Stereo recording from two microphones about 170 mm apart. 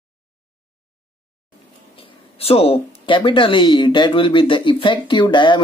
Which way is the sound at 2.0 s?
35° left (ahead or behind).